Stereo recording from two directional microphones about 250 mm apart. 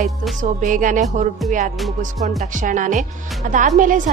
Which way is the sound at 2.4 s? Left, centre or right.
Right.